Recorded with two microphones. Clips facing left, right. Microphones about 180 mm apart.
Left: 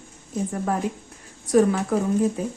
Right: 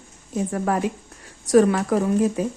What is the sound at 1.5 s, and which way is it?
Speech, 75° right (ahead or behind).